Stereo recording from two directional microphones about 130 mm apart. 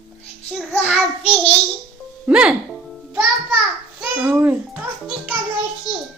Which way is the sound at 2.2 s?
10° right (ahead or behind).